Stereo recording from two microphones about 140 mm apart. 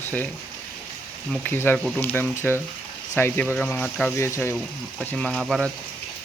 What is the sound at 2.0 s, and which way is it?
Speech, 15° left (ahead or behind).